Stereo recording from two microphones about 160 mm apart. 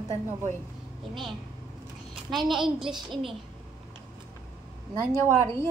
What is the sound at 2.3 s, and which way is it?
Speech, centre (ahead or behind).